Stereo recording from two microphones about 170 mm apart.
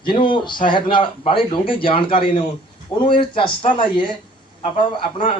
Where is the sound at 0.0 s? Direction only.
30° left (ahead or behind).